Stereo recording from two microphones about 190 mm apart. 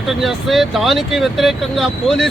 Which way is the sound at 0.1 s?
Centre (ahead or behind).